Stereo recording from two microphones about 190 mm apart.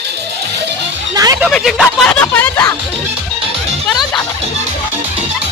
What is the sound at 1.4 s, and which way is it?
Speech, centre (ahead or behind).